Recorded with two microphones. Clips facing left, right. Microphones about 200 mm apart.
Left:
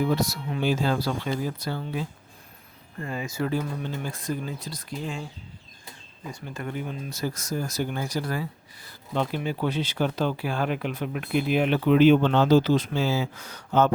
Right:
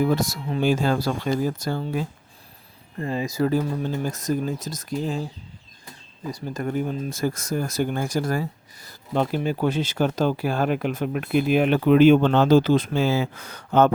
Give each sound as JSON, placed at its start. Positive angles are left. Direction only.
{"t": 0.0, "sound": "speech", "side_deg": -45}
{"t": 3.0, "sound": "speech", "side_deg": -30}
{"t": 6.3, "sound": "speech", "side_deg": -40}